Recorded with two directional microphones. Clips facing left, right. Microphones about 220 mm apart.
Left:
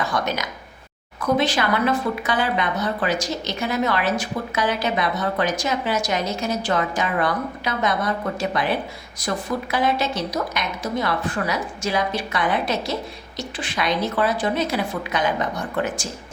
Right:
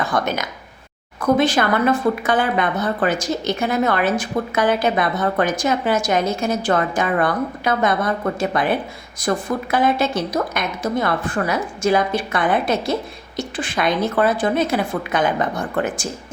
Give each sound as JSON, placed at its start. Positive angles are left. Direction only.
{"t": 0.1, "sound": "a woman's voice", "side_deg": -50}
{"t": 9.7, "sound": "a woman's voice", "side_deg": -50}